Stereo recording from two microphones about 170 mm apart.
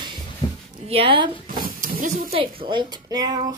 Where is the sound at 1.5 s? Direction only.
55° right (ahead or behind).